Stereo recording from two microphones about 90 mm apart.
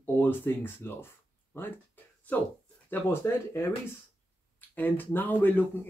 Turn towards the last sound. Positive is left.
turn(degrees=25)  # may be behind; listen again after turning